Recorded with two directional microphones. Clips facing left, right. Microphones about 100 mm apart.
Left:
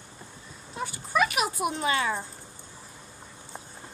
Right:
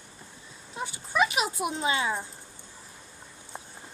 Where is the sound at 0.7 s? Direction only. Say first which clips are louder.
Left 1 dB; 20° right (ahead or behind).